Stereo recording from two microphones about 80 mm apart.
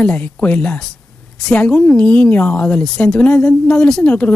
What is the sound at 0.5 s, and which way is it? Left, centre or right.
A man's voice, left.